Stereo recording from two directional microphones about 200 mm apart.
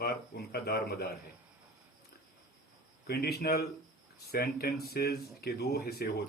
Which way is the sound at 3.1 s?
50° left (ahead or behind).